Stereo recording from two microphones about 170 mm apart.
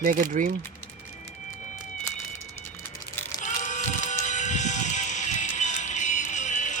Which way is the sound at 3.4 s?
45° left (ahead or behind).